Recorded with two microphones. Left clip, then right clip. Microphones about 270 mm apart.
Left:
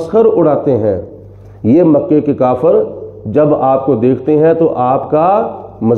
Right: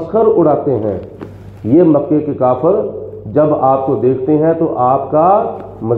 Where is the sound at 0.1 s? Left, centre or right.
Left.